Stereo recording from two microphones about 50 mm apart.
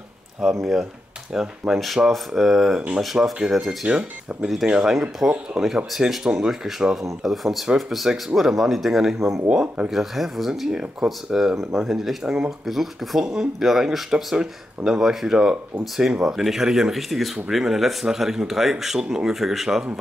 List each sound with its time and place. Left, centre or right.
0.4 s speech: centre
3.8 s speech: centre
5.9 s speech: centre
9.5 s speech: centre
9.8 s speech: centre